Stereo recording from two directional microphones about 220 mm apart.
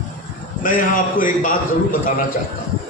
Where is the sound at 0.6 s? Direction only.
40° left (ahead or behind).